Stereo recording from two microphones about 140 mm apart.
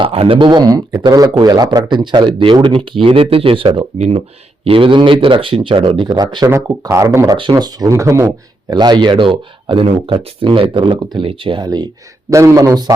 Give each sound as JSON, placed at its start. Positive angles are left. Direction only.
{"t": 0.0, "sound": "speech", "side_deg": -40}
{"t": 6.5, "sound": "speech", "side_deg": -20}